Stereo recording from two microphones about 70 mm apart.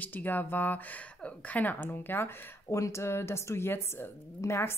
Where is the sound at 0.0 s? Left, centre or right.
Left.